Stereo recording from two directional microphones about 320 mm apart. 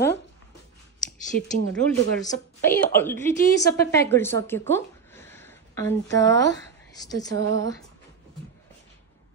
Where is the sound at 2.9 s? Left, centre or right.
Centre.